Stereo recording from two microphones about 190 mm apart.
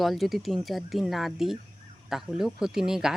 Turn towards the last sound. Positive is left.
turn(degrees=-5)  # may be behind; listen again after turning